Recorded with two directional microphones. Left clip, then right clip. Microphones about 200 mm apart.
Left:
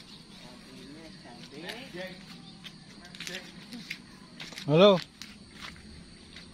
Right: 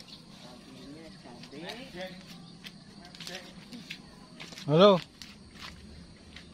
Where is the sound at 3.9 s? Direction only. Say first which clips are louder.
Left 4 dB; 25° left (ahead or behind).